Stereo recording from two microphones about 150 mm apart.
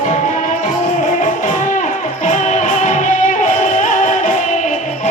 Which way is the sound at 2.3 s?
55° left (ahead or behind).